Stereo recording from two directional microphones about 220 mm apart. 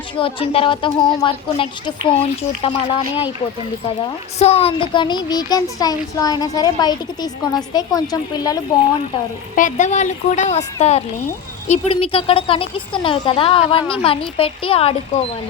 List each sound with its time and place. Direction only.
0.2 s a woman's voice: 25° left (ahead or behind)
4.4 s speech: 30° left (ahead or behind)
9.6 s a woman's voice: 35° left (ahead or behind)